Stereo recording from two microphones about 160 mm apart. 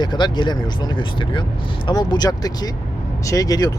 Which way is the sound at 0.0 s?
30° left (ahead or behind).